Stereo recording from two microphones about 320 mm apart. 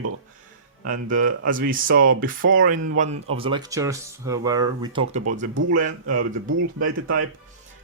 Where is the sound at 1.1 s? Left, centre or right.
Right.